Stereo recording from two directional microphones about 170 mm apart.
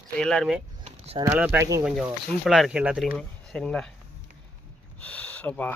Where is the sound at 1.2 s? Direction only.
10° right (ahead or behind).